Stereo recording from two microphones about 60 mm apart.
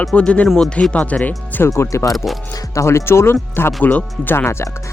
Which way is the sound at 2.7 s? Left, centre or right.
Left.